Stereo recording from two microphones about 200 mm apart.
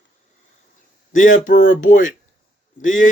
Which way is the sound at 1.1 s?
40° left (ahead or behind).